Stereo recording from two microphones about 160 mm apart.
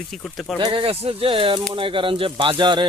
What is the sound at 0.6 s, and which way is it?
Speech, 35° right (ahead or behind).